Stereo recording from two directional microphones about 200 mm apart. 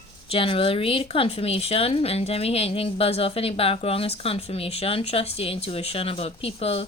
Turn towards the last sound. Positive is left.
turn(degrees=30)  # may be behind; listen again after turning